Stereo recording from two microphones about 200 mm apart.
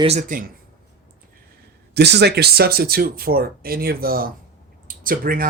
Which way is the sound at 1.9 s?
55° right (ahead or behind).